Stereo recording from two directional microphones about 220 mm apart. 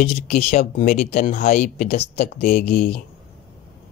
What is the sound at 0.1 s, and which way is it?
Speech, 25° left (ahead or behind).